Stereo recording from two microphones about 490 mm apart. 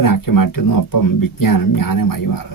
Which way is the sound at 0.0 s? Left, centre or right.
Left.